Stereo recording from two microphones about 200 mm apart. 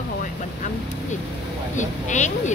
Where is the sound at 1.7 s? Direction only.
35° left (ahead or behind).